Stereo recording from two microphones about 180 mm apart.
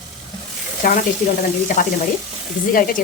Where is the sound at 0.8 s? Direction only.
50° left (ahead or behind).